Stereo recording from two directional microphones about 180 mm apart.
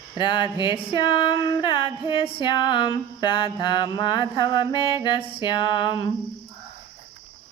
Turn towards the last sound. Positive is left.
turn(degrees=25)  # may be behind; listen again after turning